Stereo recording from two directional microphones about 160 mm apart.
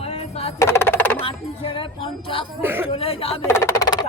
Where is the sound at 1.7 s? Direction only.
35° left (ahead or behind).